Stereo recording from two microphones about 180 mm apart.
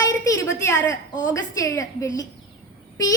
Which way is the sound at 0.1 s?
20° left (ahead or behind).